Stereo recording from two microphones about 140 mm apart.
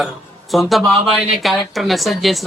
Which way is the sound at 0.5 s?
Centre (ahead or behind).